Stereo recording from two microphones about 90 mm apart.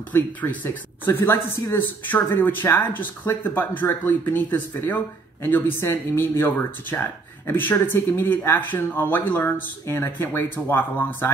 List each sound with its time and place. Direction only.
0.1 s speech: 20° left (ahead or behind)